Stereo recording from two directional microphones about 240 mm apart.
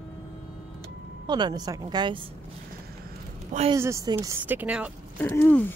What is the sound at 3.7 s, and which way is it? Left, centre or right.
A woman's voice, centre.